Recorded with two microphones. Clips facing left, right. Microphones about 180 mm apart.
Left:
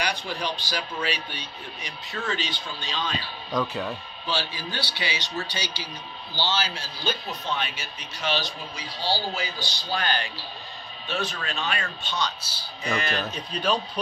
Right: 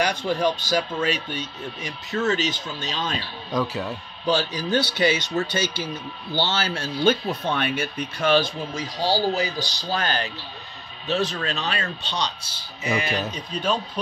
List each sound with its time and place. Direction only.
0.0 s speech: 45° right (ahead or behind)
3.5 s speech: 5° right (ahead or behind)
4.3 s speech: 45° right (ahead or behind)
12.8 s speech: 15° right (ahead or behind)